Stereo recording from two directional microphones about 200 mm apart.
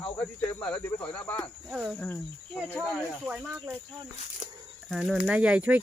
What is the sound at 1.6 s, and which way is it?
Speech, 5° right (ahead or behind).